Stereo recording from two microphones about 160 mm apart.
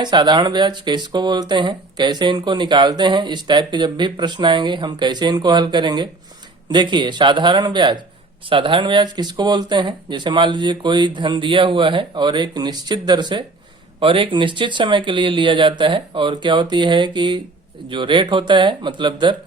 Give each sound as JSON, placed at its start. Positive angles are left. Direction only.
{"t": 0.0, "sound": "speech", "side_deg": -30}